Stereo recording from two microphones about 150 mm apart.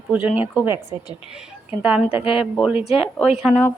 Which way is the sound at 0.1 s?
10° right (ahead or behind).